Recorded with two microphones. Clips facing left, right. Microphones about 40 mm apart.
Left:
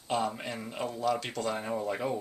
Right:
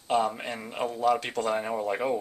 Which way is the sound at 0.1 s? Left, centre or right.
Centre.